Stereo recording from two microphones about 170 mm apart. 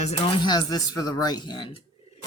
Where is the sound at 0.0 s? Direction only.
30° left (ahead or behind).